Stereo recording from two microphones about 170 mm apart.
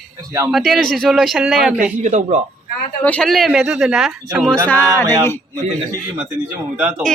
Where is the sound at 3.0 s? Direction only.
5° left (ahead or behind).